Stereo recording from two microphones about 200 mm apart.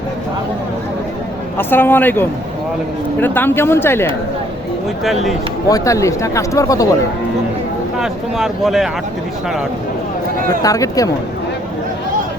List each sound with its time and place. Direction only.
1.5 s speech: 10° left (ahead or behind)
5.6 s speech: 15° left (ahead or behind)
7.9 s speech: centre (ahead or behind)
10.6 s speech: 15° left (ahead or behind)